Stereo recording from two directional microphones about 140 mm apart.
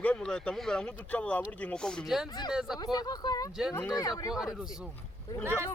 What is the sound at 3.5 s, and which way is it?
Speech, 5° right (ahead or behind).